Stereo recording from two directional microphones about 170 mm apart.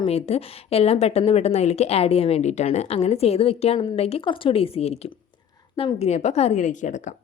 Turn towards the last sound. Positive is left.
turn(degrees=45)  # may be behind; listen again after turning